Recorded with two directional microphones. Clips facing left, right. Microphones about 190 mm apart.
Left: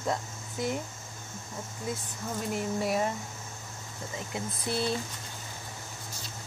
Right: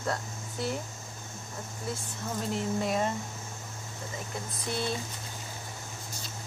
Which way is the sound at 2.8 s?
5° left (ahead or behind).